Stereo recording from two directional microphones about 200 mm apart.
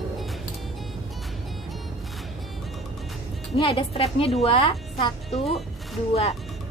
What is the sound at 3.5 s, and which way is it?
A woman's voice, 30° left (ahead or behind).